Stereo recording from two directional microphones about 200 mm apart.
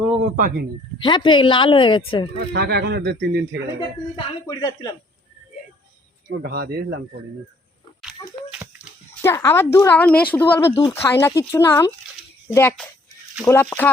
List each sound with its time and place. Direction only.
0.2 s speech: 45° right (ahead or behind)
0.9 s speech: 25° left (ahead or behind)
2.5 s speech: 55° right (ahead or behind)
4.4 s speech: 20° left (ahead or behind)
6.2 s speech: 50° right (ahead or behind)
9.2 s speech: 15° left (ahead or behind)